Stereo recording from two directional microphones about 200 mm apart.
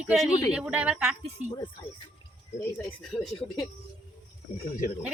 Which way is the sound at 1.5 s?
20° left (ahead or behind).